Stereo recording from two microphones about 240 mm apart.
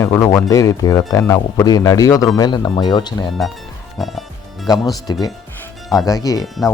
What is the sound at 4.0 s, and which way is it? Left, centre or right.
Music, centre.